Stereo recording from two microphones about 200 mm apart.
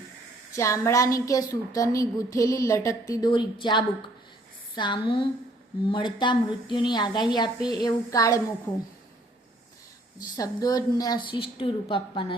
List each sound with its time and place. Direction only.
0.5 s a woman's voice: 15° left (ahead or behind)
10.2 s a woman's voice: 20° left (ahead or behind)